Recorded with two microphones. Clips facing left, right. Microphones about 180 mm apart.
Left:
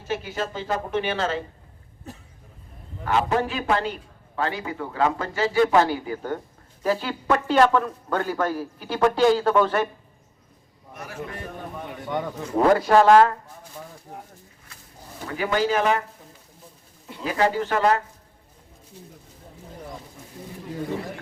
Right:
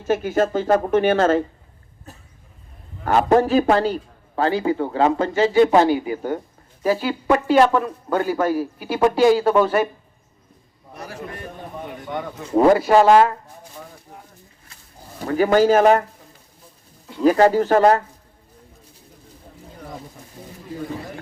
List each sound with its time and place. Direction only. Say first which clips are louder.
0.0 s speech: right 9 dB; 50° right (ahead or behind)
3.0 s a man's voice: right 7 dB; 45° right (ahead or behind); by 9.9 s 10° right (ahead or behind)
10.9 s a man's voice: right 3 dB; 35° right (ahead or behind)
12.5 s speech: right 3 dB; 10° right (ahead or behind)
15.3 s speech: right 8 dB; 40° right (ahead or behind)
17.2 s a man's voice: right 8 dB; 45° right (ahead or behind)